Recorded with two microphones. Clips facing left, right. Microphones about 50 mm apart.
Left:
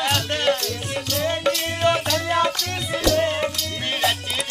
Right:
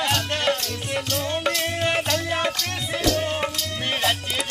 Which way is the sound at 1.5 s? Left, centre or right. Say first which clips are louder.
Left 4 dB; centre.